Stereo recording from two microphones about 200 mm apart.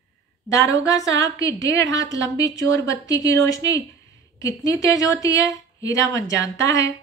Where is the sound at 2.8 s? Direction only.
60° right (ahead or behind).